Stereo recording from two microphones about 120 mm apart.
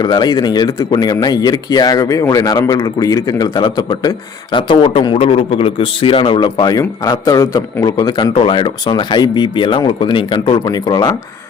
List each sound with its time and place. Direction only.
0.0 s a man's voice: 35° left (ahead or behind)